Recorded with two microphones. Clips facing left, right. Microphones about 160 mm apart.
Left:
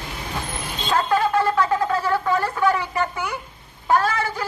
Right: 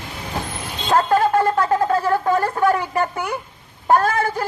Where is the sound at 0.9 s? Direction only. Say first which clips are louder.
Right 4 dB; 45° right (ahead or behind).